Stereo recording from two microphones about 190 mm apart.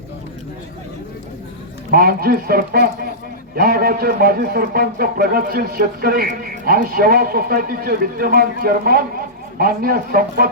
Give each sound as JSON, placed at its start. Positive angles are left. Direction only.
{"t": 1.9, "sound": "a man's voice", "side_deg": -50}